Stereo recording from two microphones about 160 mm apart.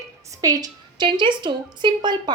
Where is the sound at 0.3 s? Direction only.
20° right (ahead or behind).